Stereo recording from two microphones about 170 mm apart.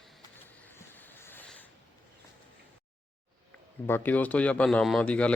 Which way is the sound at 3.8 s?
10° left (ahead or behind).